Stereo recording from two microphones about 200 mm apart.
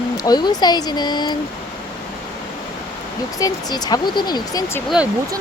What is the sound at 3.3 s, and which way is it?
Speech, 20° left (ahead or behind).